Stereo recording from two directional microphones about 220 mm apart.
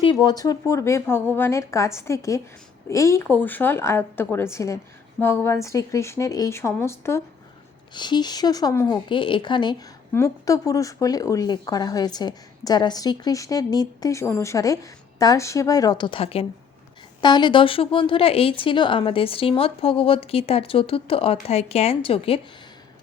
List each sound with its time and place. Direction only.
0.0 s a woman's voice: 20° left (ahead or behind)